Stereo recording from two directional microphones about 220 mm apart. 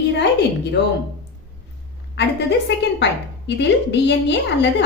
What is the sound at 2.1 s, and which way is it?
A woman's voice, 50° left (ahead or behind).